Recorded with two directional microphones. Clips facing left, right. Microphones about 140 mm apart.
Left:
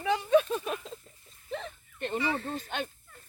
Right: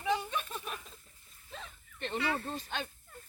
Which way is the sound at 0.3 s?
90° left.